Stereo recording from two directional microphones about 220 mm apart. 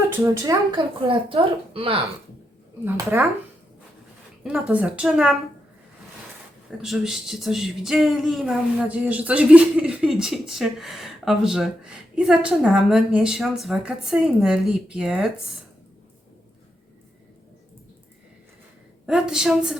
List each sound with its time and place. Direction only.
0.2 s speech: 15° right (ahead or behind)
1.0 s a woman's voice: 25° right (ahead or behind)
2.8 s speech: 10° right (ahead or behind)
4.4 s speech: 5° right (ahead or behind)
6.7 s speech: centre (ahead or behind)
19.0 s speech: 5° right (ahead or behind)